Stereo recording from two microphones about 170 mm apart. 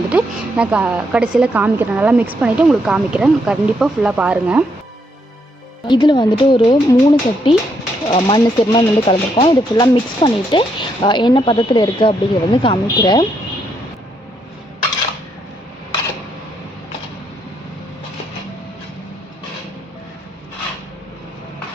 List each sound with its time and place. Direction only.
0.1 s a woman's voice: 10° right (ahead or behind)
5.9 s speech: 25° left (ahead or behind)